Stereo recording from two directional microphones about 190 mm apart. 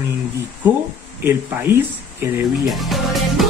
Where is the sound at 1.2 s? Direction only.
10° right (ahead or behind).